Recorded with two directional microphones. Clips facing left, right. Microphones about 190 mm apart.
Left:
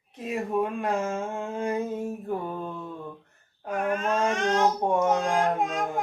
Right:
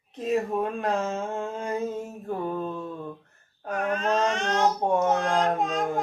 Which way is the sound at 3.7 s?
10° left (ahead or behind).